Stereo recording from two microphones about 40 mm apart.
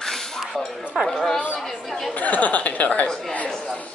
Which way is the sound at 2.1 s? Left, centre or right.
Left.